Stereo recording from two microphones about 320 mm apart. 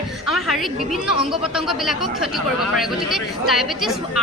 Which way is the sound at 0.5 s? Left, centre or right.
Centre.